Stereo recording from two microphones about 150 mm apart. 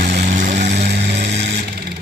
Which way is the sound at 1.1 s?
50° right (ahead or behind).